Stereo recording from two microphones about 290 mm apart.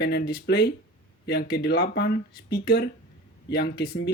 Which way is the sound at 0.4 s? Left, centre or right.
Left.